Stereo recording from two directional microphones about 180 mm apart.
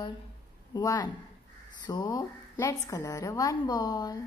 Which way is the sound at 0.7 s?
20° left (ahead or behind).